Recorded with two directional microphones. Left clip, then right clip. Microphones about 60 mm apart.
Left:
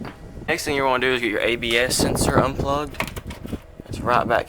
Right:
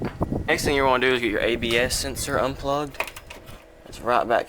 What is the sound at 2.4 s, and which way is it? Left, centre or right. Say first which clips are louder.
Speech: left 2 dB; centre.